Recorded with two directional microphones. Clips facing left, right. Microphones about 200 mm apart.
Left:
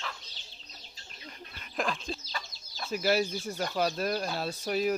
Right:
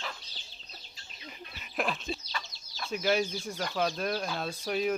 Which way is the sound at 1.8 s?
5° right (ahead or behind).